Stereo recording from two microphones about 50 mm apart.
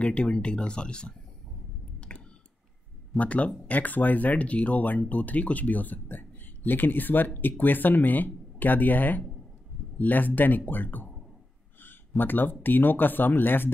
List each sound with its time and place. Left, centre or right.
0.0 s speech: left
2.0 s a sound: left
3.2 s speech: left
12.2 s speech: left